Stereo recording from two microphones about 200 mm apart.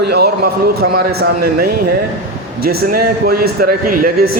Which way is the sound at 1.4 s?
50° right (ahead or behind).